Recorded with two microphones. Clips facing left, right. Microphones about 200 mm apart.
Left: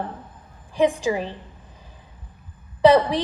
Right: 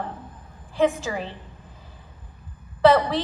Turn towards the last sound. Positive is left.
turn(degrees=15)  # may be behind; listen again after turning